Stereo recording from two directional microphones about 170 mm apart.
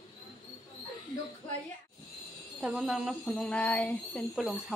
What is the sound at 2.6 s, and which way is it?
Speech, 5° right (ahead or behind).